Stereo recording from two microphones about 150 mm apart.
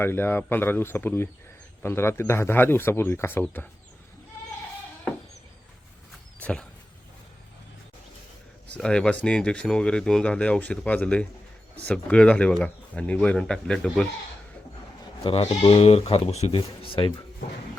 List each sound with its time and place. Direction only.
0.0 s speech: 15° left (ahead or behind)
6.4 s a sound: 5° left (ahead or behind)
8.8 s speech: 5° left (ahead or behind)
15.2 s speech: 40° left (ahead or behind)